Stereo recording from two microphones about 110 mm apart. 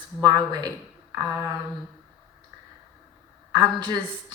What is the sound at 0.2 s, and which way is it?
Speech, 35° right (ahead or behind).